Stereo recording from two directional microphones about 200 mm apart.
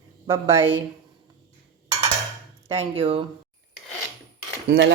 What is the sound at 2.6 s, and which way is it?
Speech, 30° right (ahead or behind).